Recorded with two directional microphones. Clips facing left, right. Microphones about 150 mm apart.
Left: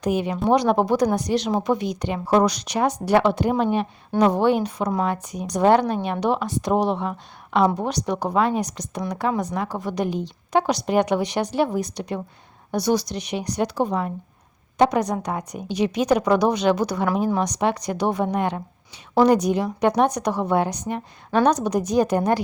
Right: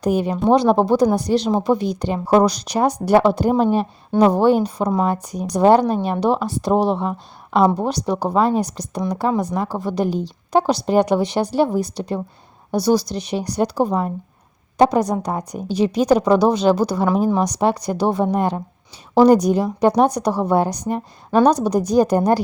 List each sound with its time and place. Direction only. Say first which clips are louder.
0.0 s a woman's voice: right 4 dB; 35° right (ahead or behind)